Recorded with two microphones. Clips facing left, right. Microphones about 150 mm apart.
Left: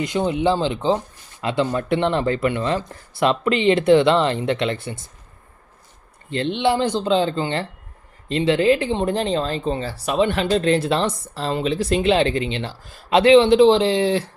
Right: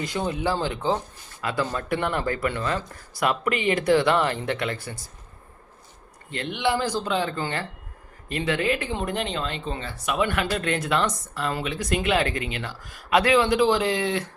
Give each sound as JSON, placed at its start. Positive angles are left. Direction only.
{"t": 0.0, "sound": "speech", "side_deg": 20}
{"t": 6.3, "sound": "speech", "side_deg": 30}